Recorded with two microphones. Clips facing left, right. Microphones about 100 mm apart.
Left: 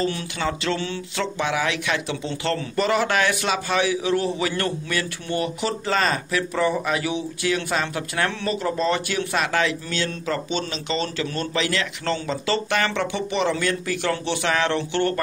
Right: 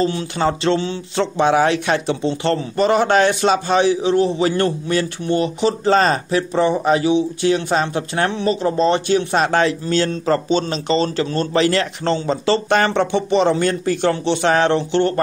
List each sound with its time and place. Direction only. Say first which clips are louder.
0.0 s speech: right 6 dB; 30° right (ahead or behind)